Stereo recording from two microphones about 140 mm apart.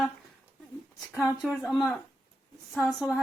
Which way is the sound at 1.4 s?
Centre (ahead or behind).